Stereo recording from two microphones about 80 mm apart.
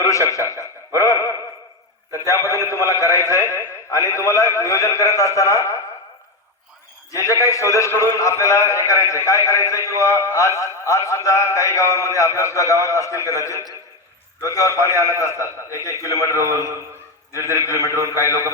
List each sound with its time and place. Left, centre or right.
0.0 s a man's voice: left
7.1 s a man's voice: left